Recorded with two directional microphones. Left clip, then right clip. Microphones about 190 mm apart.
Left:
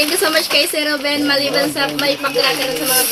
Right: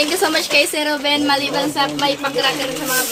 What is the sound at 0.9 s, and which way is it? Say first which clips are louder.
Speech: even; 30° right (ahead or behind).